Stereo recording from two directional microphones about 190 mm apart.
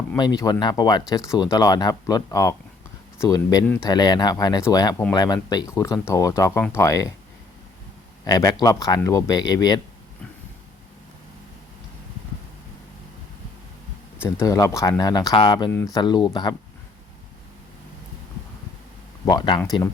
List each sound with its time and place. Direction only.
0.2 s speech: 20° left (ahead or behind)
8.2 s speech: 20° left (ahead or behind)
14.3 s speech: 15° left (ahead or behind)
19.2 s speech: 20° left (ahead or behind)